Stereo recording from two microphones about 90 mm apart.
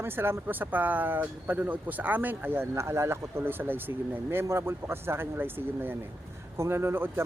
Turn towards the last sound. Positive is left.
turn(degrees=-25)  # may be behind; listen again after turning